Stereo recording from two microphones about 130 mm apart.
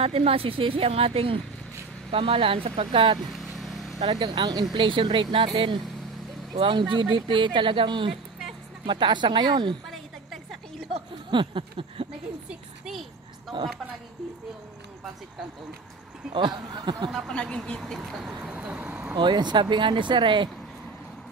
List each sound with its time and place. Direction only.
0.0 s a woman's voice: 50° right (ahead or behind)
3.5 s vehicle: centre (ahead or behind)
4.1 s speech: 35° right (ahead or behind)
9.8 s a sound: centre (ahead or behind)
11.2 s speech: 40° right (ahead or behind)
12.4 s speech: 5° right (ahead or behind)
16.3 s speech: 35° right (ahead or behind)
17.3 s speech: 5° left (ahead or behind); by 19.1 s 10° right (ahead or behind)
19.1 s speech: 35° right (ahead or behind)